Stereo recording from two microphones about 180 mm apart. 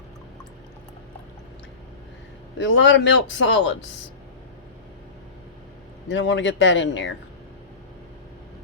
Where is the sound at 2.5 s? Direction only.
90° left.